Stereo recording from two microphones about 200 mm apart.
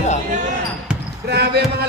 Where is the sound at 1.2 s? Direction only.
55° right (ahead or behind).